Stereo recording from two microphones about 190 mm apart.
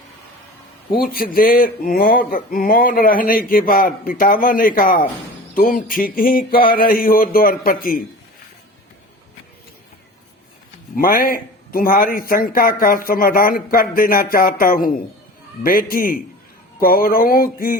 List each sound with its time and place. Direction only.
0.9 s speech: 50° left (ahead or behind)
10.9 s speech: 50° left (ahead or behind)